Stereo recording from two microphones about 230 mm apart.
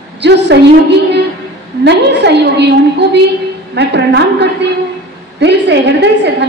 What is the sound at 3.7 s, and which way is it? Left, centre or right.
A woman's voice, right.